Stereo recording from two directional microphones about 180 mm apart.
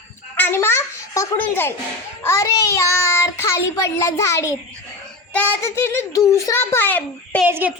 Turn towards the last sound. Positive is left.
turn(degrees=-10)  # may be behind; listen again after turning